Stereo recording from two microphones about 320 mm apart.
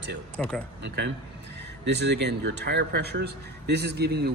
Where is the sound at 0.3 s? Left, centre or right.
Centre.